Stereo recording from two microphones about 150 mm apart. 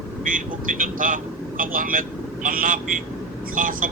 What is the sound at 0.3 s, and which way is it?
Speech, 65° right (ahead or behind).